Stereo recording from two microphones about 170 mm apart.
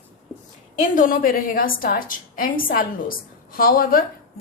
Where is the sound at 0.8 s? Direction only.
55° left (ahead or behind).